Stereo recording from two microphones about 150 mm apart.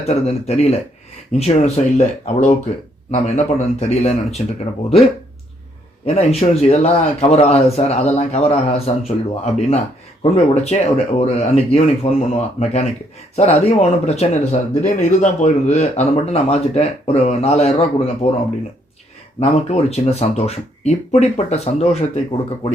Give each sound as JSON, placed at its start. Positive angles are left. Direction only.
{"t": 0.0, "sound": "speech", "side_deg": 45}
{"t": 6.1, "sound": "speech", "side_deg": 45}
{"t": 19.4, "sound": "speech", "side_deg": 45}